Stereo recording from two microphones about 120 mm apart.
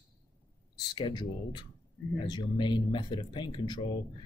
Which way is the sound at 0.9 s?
40° left (ahead or behind).